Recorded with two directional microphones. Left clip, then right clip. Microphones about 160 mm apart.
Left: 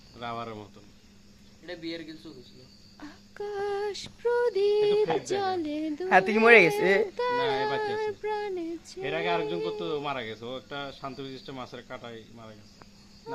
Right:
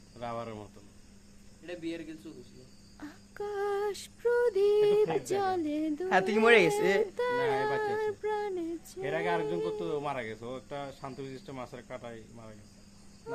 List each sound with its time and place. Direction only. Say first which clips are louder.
0.2 s female singing: left 2 dB; centre (ahead or behind)
1.6 s a man's voice: left 2 dB; 10° left (ahead or behind)
3.0 s female singing: left 1 dB; 10° right (ahead or behind)
6.3 s speech: left 4 dB; 25° left (ahead or behind)
7.2 s female singing: left 2 dB; 10° right (ahead or behind)